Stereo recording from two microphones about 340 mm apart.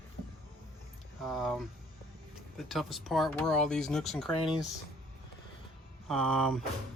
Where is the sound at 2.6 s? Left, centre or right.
Centre.